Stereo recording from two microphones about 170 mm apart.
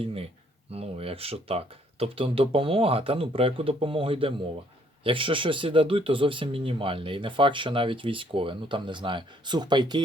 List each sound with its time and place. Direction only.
0.0 s speech: 35° right (ahead or behind)